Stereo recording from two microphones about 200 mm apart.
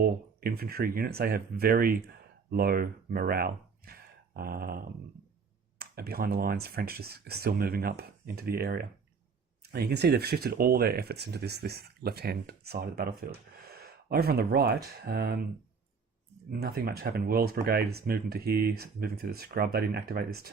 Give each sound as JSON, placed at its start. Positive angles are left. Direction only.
{"t": 0.0, "sound": "speech", "side_deg": -50}
{"t": 5.8, "sound": "speech", "side_deg": -50}
{"t": 16.5, "sound": "speech", "side_deg": -50}